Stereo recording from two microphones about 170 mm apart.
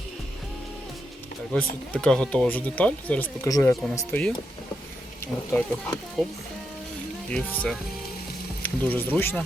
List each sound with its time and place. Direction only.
1.5 s speech: 5° left (ahead or behind)
7.3 s speech: 5° left (ahead or behind)